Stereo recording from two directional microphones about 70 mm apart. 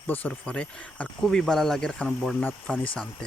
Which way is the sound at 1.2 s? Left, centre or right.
Centre.